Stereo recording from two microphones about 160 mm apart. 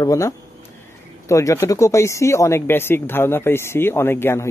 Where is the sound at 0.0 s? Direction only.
20° left (ahead or behind).